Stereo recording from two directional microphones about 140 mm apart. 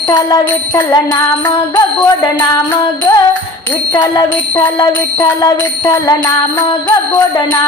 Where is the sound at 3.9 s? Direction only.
30° left (ahead or behind).